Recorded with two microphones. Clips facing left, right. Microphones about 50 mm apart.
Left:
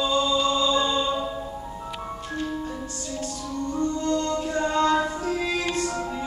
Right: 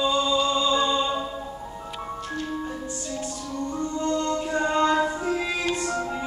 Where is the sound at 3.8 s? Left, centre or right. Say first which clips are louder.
Left 1 dB; centre.